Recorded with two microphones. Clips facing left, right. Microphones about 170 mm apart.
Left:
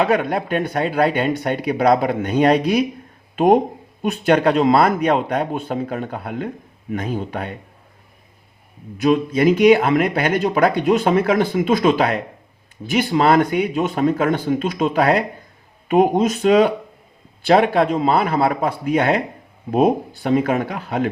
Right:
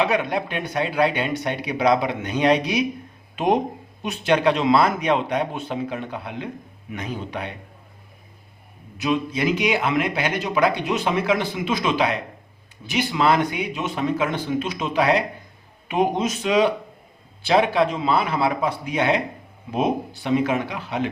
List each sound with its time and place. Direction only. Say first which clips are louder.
0.0 s a man's voice: left 3 dB; 50° left (ahead or behind)
9.0 s a man's voice: left 6 dB; 50° left (ahead or behind)